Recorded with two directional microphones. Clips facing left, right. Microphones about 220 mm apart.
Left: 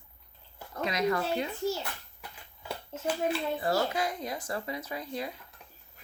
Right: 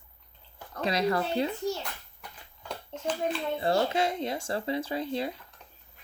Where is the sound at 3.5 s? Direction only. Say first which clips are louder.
Right 3 dB; 25° right (ahead or behind).